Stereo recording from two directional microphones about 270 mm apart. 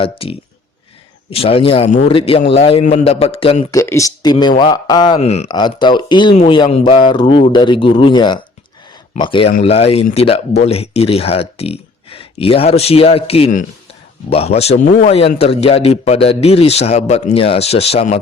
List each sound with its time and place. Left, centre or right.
0.0 s a man's voice: centre